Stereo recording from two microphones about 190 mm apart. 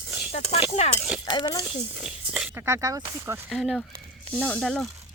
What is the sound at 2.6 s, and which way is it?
Speech, 15° right (ahead or behind).